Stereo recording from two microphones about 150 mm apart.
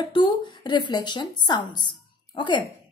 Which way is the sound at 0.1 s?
30° left (ahead or behind).